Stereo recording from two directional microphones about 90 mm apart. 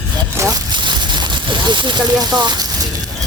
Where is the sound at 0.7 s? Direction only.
55° right (ahead or behind).